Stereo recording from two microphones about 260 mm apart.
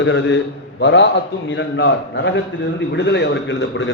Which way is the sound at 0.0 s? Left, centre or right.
Left.